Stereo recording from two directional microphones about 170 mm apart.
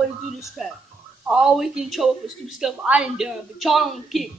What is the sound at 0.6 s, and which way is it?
A woman's voice, centre (ahead or behind).